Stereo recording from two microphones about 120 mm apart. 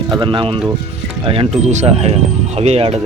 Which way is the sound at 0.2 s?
45° right (ahead or behind).